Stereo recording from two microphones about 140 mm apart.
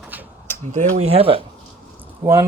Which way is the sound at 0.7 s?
50° right (ahead or behind).